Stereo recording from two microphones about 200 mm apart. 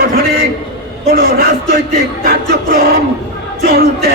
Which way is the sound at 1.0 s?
50° right (ahead or behind).